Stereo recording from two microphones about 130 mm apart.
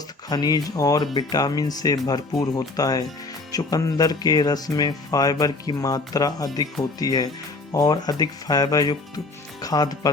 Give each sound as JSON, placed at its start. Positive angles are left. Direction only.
{"t": 0.3, "sound": "speech", "side_deg": 30}